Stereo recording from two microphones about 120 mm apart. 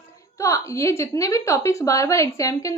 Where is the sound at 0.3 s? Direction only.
25° left (ahead or behind).